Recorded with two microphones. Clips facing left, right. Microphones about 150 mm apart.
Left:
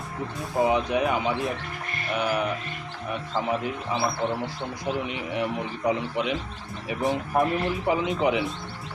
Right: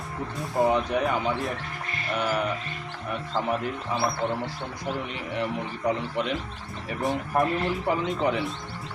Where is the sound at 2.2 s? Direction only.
15° left (ahead or behind).